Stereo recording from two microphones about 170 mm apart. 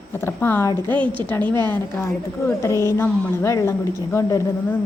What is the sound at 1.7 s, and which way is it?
A woman's voice, 15° left (ahead or behind).